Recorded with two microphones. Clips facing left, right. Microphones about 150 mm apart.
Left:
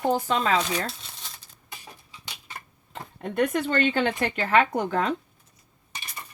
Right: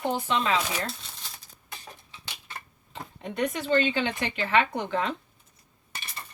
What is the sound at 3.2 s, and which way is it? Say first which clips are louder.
Speech: left 5 dB; 50° left (ahead or behind).